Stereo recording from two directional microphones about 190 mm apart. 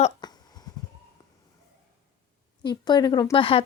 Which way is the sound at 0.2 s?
20° left (ahead or behind).